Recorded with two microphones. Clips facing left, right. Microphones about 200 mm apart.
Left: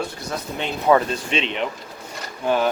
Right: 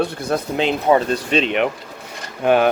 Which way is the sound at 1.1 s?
40° right (ahead or behind).